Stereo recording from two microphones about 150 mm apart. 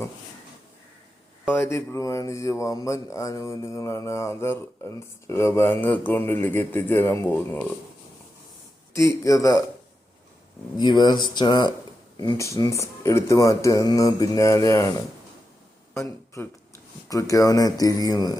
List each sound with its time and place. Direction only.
1.5 s speech: 20° left (ahead or behind)
9.0 s speech: 20° left (ahead or behind)
10.8 s speech: 30° left (ahead or behind)